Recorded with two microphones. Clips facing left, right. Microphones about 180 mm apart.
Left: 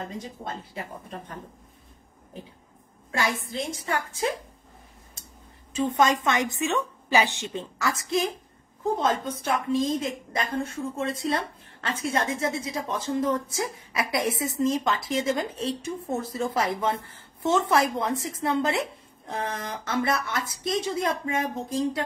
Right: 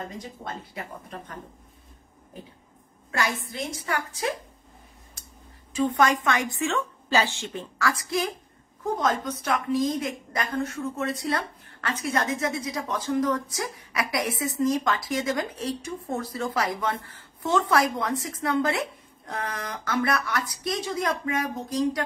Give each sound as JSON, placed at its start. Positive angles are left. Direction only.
{"t": 0.2, "sound": "a woman's voice", "side_deg": 25}
{"t": 3.1, "sound": "a woman's voice", "side_deg": 25}
{"t": 5.8, "sound": "a woman's voice", "side_deg": 20}